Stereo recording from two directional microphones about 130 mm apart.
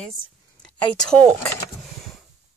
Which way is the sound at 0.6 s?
5° left (ahead or behind).